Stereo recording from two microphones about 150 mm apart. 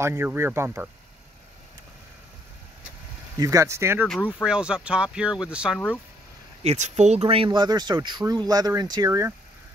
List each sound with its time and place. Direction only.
0.0 s speech: 15° right (ahead or behind)
3.3 s speech: 20° right (ahead or behind)
4.3 s speech: 5° right (ahead or behind)
6.6 s speech: 50° right (ahead or behind); by 9.3 s 20° right (ahead or behind)